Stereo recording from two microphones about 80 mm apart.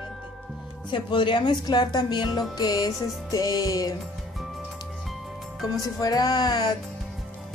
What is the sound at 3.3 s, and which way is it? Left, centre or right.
Music, left.